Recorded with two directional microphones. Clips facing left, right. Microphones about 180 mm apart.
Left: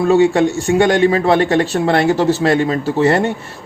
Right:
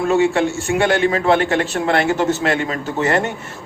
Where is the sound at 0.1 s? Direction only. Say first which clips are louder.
Left 4 dB; 35° left (ahead or behind).